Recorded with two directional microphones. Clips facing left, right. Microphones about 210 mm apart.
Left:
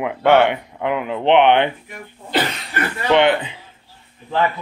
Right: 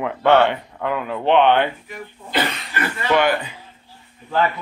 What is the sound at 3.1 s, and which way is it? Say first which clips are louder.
Speech: left 3 dB; 25° left (ahead or behind).